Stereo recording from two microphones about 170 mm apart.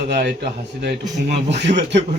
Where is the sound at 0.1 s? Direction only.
75° right (ahead or behind); by 2.0 s 90° right.